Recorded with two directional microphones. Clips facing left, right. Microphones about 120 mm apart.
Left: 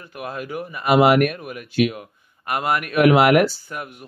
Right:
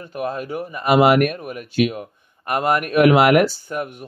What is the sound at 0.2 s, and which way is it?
Speech, 35° right (ahead or behind).